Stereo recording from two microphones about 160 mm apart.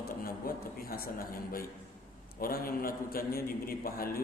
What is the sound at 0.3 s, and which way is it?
A man's voice, 65° left (ahead or behind).